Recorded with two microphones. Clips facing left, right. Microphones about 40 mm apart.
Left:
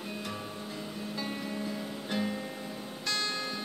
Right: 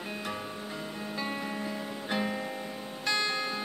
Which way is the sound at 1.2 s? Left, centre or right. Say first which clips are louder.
Right 2 dB; right.